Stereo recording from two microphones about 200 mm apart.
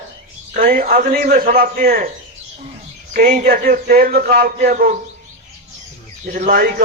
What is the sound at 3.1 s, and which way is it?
A man's voice, 40° right (ahead or behind).